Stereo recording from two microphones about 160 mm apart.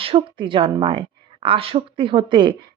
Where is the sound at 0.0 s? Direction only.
35° right (ahead or behind).